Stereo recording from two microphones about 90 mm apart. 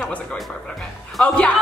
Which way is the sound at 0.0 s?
15° left (ahead or behind).